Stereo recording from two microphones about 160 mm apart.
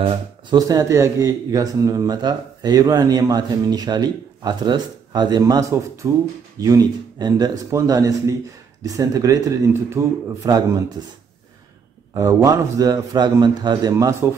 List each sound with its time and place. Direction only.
0.5 s a man's voice: 20° right (ahead or behind)
12.1 s a man's voice: 20° right (ahead or behind)